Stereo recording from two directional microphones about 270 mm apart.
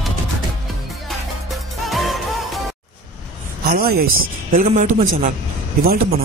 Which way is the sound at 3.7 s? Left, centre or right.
Right.